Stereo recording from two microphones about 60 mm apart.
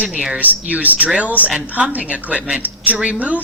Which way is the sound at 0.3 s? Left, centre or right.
Right.